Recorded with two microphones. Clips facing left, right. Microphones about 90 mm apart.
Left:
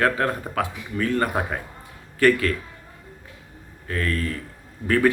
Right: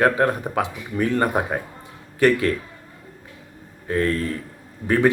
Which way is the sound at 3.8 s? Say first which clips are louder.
Right 4 dB; 25° right (ahead or behind).